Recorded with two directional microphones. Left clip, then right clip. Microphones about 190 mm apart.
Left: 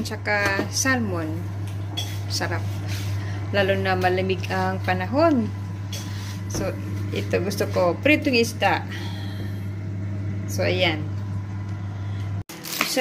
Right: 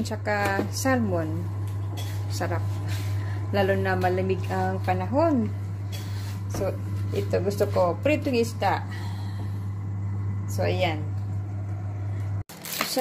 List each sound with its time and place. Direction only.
0.0 s a woman's voice: 25° right (ahead or behind)
2.3 s a woman's voice: 20° right (ahead or behind)
7.2 s speech: 10° right (ahead or behind)
10.6 s speech: 15° right (ahead or behind)